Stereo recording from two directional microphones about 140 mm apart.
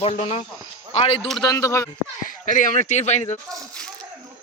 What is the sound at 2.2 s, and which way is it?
Speech, 70° left (ahead or behind).